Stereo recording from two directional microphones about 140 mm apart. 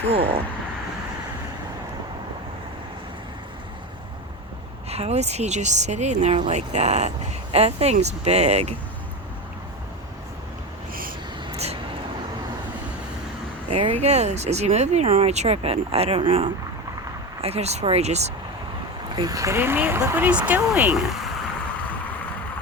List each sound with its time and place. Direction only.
0.1 s speech: 45° right (ahead or behind)
4.9 s speech: 50° right (ahead or behind)
11.5 s vehicle: 50° right (ahead or behind)
13.7 s speech: 45° right (ahead or behind)
19.1 s speech: 25° right (ahead or behind)